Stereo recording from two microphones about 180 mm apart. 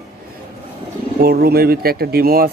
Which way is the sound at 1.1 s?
60° right (ahead or behind).